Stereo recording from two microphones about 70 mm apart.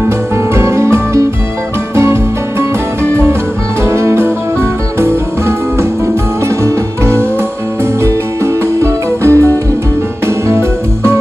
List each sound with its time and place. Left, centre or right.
0.6 s music: right
3.9 s music: right
6.6 s music: right
9.3 s music: left